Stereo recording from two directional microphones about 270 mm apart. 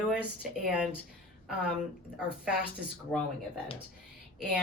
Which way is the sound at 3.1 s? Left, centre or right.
Centre.